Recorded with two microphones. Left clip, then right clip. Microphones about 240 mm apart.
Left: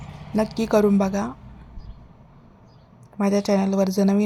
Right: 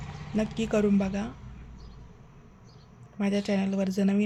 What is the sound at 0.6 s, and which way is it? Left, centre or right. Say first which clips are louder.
Speech: left 8 dB; left.